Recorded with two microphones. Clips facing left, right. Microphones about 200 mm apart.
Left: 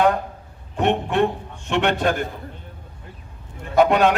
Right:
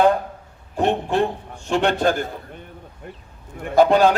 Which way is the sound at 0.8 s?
30° right (ahead or behind).